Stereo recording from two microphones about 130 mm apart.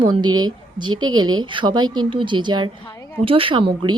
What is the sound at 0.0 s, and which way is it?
A woman's voice, 35° right (ahead or behind).